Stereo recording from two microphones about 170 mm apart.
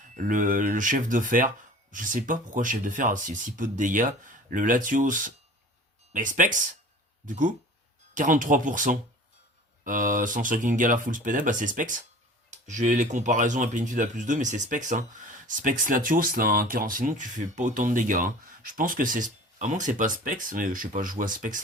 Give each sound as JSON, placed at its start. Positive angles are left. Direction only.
{"t": 0.0, "sound": "speech", "side_deg": -50}